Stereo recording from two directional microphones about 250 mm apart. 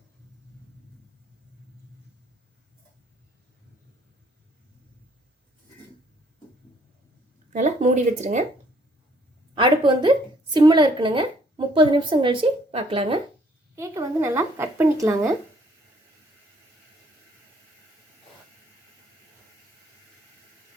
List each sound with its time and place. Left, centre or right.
7.5 s speech: right
9.6 s a woman's voice: centre
13.7 s speech: centre